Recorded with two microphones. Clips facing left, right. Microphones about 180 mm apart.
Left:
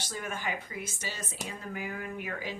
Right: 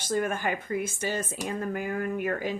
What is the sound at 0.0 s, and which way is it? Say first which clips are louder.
Speech: right 9 dB; 50° right (ahead or behind).